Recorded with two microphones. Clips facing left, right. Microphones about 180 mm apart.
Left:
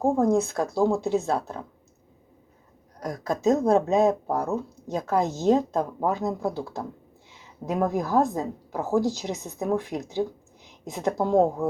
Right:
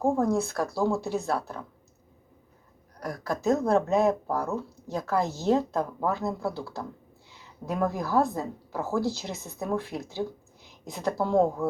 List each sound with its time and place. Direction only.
0.0 s speech: 20° left (ahead or behind)
3.0 s a woman's voice: 20° left (ahead or behind)